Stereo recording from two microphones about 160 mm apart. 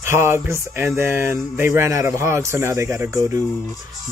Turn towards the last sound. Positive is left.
turn(degrees=-20)  # may be behind; listen again after turning